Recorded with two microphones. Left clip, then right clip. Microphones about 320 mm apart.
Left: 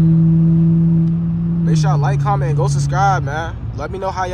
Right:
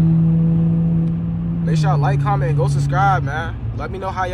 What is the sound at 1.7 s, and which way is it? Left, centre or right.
Speech, centre.